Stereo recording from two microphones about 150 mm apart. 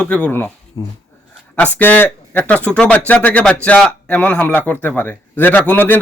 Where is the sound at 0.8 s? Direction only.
25° left (ahead or behind).